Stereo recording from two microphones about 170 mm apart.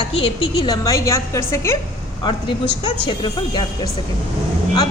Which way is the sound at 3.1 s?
25° left (ahead or behind).